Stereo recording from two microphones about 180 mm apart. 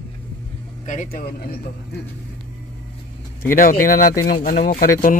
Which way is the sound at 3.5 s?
50° left (ahead or behind).